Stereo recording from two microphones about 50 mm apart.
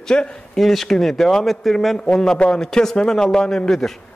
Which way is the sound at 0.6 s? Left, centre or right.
Centre.